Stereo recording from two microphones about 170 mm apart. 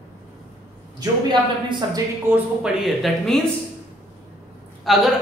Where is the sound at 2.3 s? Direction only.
5° right (ahead or behind).